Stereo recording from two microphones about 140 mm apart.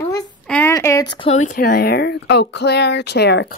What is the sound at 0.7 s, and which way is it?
Speech, 20° left (ahead or behind).